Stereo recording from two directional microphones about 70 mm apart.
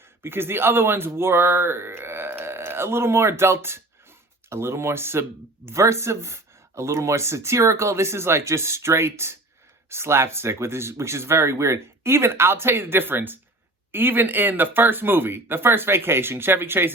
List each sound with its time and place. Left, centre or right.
0.2 s speech: right